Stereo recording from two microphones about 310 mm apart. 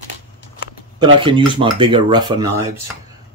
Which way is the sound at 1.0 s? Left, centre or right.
Centre.